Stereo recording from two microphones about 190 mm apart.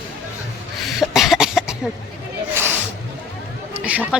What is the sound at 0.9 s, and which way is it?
Cough, centre (ahead or behind).